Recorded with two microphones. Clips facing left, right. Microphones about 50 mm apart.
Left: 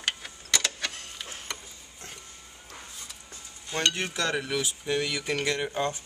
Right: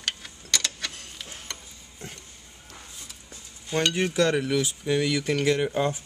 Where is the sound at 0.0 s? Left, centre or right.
Centre.